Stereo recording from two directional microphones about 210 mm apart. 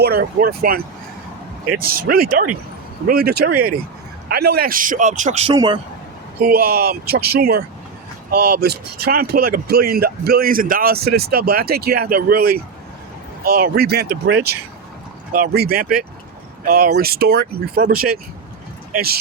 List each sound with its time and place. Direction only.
0.0 s speech: 45° right (ahead or behind)
1.8 s speech: 45° right (ahead or behind)
5.5 s a man's voice: 20° right (ahead or behind)
6.4 s speech: 45° right (ahead or behind)